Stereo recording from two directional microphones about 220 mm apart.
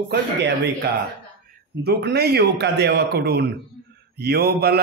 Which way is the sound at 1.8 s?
50° right (ahead or behind).